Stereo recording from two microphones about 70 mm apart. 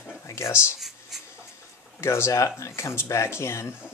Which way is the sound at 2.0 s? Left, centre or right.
Left.